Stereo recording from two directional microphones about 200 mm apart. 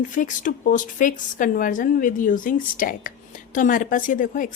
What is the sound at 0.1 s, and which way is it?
A woman's voice, 40° left (ahead or behind).